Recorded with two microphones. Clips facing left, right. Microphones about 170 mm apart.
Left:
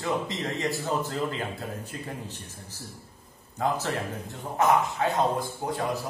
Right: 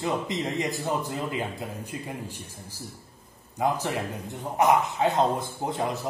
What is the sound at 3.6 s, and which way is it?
A man's voice, 15° right (ahead or behind).